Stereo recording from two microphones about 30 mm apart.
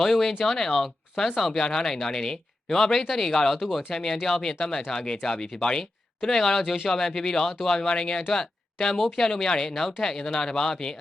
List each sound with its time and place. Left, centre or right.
0.0 s speech: centre
3.5 s speech: centre
3.9 s speech: centre
6.2 s speech: centre